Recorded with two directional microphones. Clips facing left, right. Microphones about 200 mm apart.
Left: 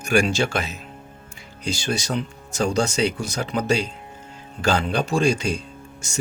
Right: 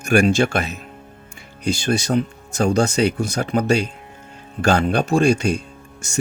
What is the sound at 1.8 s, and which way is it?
Speech, 55° right (ahead or behind).